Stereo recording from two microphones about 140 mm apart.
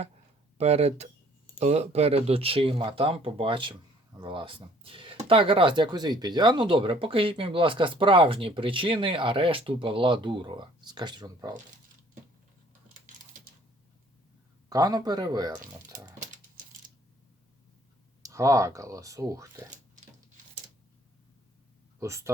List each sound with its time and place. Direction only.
0.6 s speech: 50° right (ahead or behind); by 11.5 s 30° right (ahead or behind)
14.7 s speech: 25° right (ahead or behind)
18.2 s speech: 25° right (ahead or behind)
22.0 s speech: 20° right (ahead or behind)